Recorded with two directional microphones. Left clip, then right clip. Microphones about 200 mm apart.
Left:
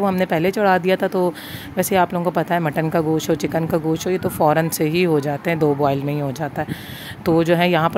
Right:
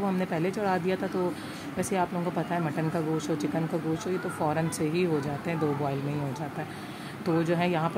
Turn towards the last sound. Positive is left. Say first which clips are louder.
# left 11 dB
turn(degrees=45)  # may be behind; listen again after turning